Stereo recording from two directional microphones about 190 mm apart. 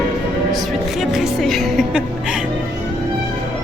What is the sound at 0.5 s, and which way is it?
Music, centre (ahead or behind).